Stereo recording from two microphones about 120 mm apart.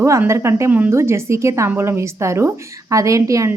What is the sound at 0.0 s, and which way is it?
Speech, 25° right (ahead or behind).